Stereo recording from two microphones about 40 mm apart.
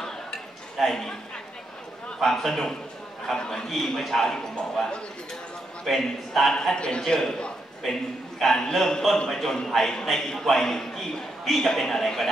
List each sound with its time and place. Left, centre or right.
0.7 s a man's voice: centre
2.1 s a man's voice: centre
3.6 s a man's voice: centre
5.9 s speech: centre
6.7 s a man's voice: left
7.0 s a man's voice: centre